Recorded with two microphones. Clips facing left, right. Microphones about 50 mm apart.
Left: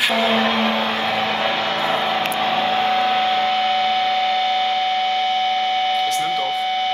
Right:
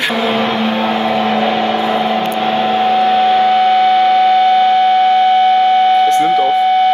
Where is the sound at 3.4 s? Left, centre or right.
Right.